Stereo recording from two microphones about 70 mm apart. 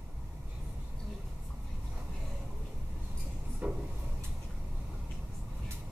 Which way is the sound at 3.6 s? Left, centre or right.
Centre.